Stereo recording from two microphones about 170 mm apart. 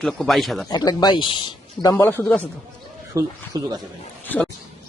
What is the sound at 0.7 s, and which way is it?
Speech, 25° left (ahead or behind).